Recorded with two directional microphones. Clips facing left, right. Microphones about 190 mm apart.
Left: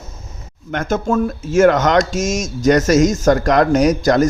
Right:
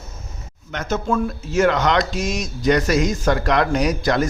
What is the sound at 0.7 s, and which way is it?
A man's voice, 50° left (ahead or behind).